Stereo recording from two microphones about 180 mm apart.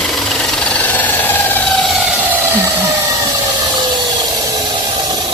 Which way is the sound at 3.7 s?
20° right (ahead or behind).